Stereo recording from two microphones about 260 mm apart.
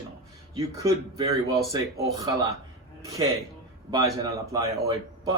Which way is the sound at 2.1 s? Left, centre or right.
Centre.